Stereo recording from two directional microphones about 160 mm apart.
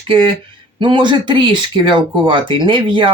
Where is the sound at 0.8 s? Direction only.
30° right (ahead or behind).